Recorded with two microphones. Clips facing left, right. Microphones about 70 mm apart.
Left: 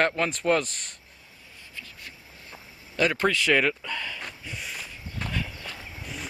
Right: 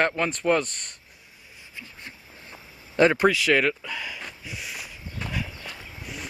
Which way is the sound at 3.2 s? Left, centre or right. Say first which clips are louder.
Right 2 dB; centre.